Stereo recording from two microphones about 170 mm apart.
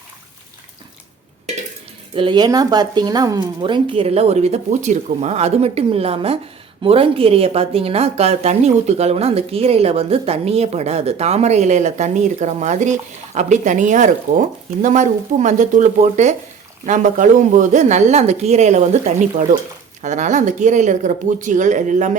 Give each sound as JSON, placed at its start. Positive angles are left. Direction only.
{"t": 2.1, "sound": "speech", "side_deg": -30}
{"t": 20.0, "sound": "speech", "side_deg": -45}